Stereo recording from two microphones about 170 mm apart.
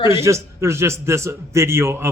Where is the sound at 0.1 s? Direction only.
15° right (ahead or behind).